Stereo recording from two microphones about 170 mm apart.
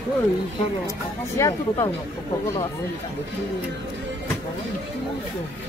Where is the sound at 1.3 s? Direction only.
20° left (ahead or behind).